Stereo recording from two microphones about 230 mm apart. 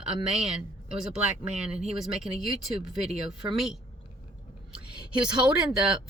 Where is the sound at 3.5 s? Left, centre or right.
Centre.